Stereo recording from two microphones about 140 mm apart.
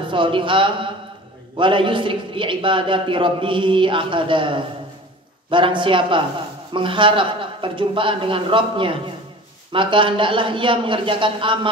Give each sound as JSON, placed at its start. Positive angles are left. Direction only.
{"t": 0.1, "sound": "a man's voice", "side_deg": -35}